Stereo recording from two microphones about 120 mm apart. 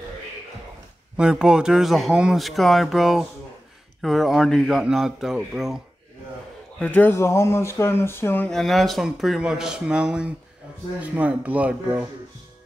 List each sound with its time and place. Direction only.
1.1 s speech: 5° right (ahead or behind)
6.8 s speech: 15° left (ahead or behind)
8.5 s speech: centre (ahead or behind)